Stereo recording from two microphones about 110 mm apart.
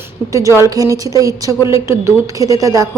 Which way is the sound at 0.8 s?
30° right (ahead or behind).